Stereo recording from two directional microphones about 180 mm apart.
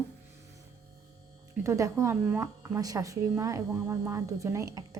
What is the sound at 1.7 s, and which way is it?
Speech, 15° right (ahead or behind).